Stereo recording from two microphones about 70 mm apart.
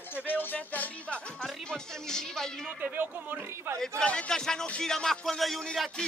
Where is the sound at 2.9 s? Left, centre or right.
Right.